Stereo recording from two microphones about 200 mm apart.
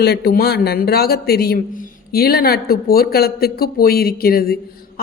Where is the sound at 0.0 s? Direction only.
55° left (ahead or behind).